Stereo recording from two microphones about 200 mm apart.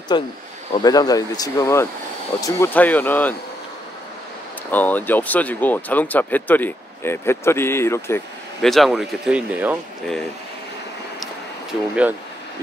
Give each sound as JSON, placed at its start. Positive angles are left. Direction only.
{"t": 0.1, "sound": "speech", "side_deg": 25}
{"t": 4.6, "sound": "speech", "side_deg": 10}
{"t": 8.6, "sound": "speech", "side_deg": 0}
{"t": 11.9, "sound": "speech", "side_deg": -5}